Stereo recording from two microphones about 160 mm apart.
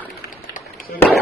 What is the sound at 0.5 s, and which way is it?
Firecracker, 60° left (ahead or behind).